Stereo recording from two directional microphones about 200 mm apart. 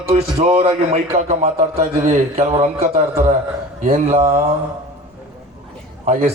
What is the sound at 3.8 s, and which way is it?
Speech, 30° right (ahead or behind).